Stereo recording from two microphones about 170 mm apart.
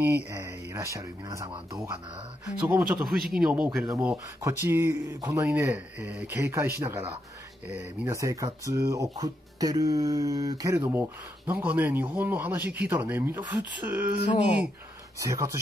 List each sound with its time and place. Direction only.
0.0 s speech: 15° right (ahead or behind)